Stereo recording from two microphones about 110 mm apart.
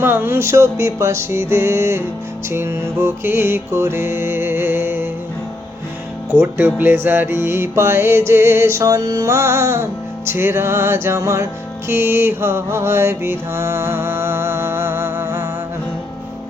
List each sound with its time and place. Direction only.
0.0 s music: 20° right (ahead or behind)
6.3 s music: 20° right (ahead or behind)
11.9 s mantra: 20° right (ahead or behind)